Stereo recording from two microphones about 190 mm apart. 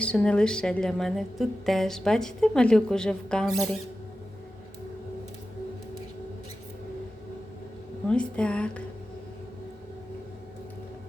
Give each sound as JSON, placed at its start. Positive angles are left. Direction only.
{"t": 0.0, "sound": "a woman's voice", "side_deg": 5}
{"t": 8.0, "sound": "a woman's voice", "side_deg": 5}